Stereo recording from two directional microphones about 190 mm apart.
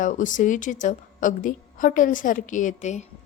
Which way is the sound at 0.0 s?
40° left (ahead or behind).